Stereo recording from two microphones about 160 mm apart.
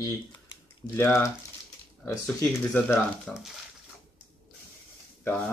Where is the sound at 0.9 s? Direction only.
15° left (ahead or behind).